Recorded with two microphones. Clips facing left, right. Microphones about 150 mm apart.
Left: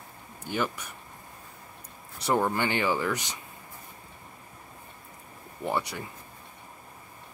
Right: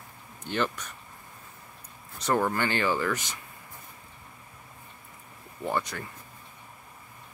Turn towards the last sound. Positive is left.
turn(degrees=15)  # may be behind; listen again after turning